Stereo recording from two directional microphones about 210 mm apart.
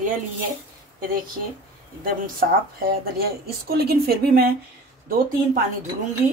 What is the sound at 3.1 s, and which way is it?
A woman's voice, 45° right (ahead or behind).